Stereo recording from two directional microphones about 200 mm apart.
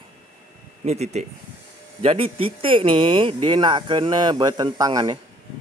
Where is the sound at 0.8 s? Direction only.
35° right (ahead or behind).